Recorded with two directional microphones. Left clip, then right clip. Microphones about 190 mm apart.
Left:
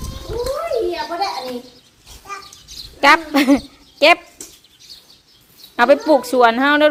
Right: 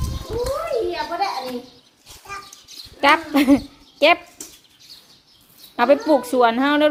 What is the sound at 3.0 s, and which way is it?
A woman's voice, centre (ahead or behind).